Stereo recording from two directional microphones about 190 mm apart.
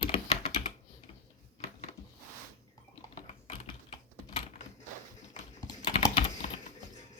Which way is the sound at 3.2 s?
30° left (ahead or behind).